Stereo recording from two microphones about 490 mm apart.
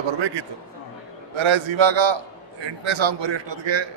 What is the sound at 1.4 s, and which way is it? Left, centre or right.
A man's voice, right.